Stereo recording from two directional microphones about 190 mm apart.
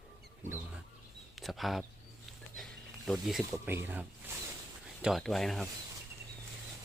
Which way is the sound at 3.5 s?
15° right (ahead or behind).